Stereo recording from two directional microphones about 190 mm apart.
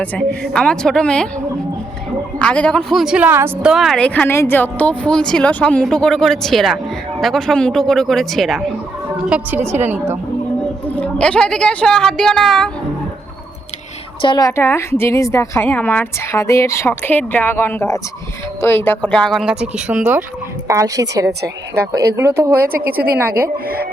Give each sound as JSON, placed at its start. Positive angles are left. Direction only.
{"t": 0.0, "sound": "a woman's voice", "side_deg": 5}
{"t": 2.4, "sound": "a woman's voice", "side_deg": 5}
{"t": 10.8, "sound": "a woman's voice", "side_deg": 5}
{"t": 14.2, "sound": "a woman's voice", "side_deg": 25}
{"t": 22.6, "sound": "a woman's voice", "side_deg": -50}